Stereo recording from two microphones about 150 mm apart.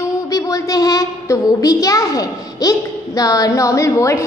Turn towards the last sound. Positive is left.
turn(degrees=20)  # may be behind; listen again after turning